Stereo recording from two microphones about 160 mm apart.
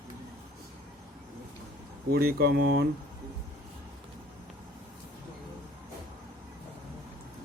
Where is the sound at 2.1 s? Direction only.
70° right (ahead or behind); by 2.9 s 90° right.